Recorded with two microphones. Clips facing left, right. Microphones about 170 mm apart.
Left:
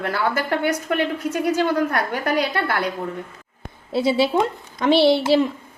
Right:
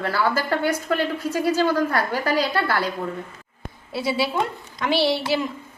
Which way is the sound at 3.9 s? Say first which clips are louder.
Left 5 dB; 25° left (ahead or behind).